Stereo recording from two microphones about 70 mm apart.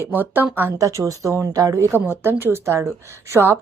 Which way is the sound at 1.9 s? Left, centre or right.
Right.